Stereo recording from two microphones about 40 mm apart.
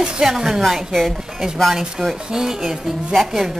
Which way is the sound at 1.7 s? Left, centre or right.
Centre.